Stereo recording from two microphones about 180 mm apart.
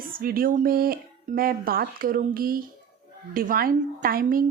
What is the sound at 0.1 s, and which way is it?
Speech, 55° right (ahead or behind).